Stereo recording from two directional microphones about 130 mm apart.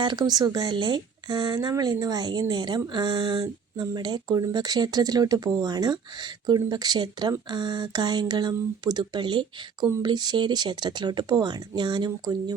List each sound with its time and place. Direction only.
0.0 s speech: 35° right (ahead or behind)